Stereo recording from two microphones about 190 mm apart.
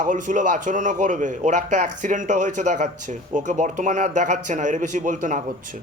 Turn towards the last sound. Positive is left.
turn(degrees=-45)  # may be behind; listen again after turning